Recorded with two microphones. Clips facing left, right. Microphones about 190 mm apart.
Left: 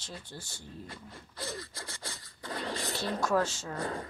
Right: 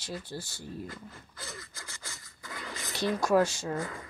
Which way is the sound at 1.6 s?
30° left (ahead or behind).